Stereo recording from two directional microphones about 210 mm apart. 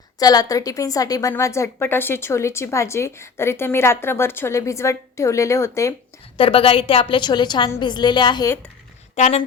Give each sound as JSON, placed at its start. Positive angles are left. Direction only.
{"t": 0.2, "sound": "a woman's voice", "side_deg": 20}
{"t": 6.3, "sound": "a woman's voice", "side_deg": 25}
{"t": 9.1, "sound": "speech", "side_deg": 30}